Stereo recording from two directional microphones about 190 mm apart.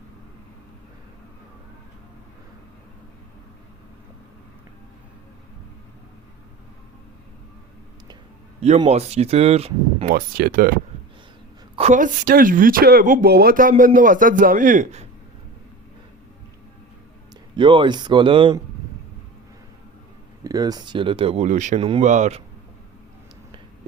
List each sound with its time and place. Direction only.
8.8 s speech: 35° right (ahead or behind)
10.1 s speech: 50° right (ahead or behind)
11.8 s speech: 40° right (ahead or behind)
17.6 s speech: 25° right (ahead or behind)
20.4 s speech: 20° right (ahead or behind); by 21.8 s 40° right (ahead or behind)
21.8 s speech: 30° right (ahead or behind)